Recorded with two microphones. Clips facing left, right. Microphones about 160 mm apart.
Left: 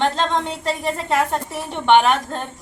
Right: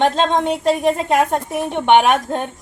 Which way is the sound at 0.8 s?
15° right (ahead or behind).